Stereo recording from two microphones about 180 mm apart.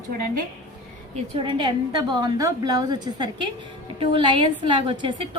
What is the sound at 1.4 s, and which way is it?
A woman's voice, 25° right (ahead or behind).